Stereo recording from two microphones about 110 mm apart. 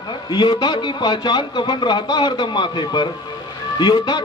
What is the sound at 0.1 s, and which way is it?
A man's voice, 45° left (ahead or behind).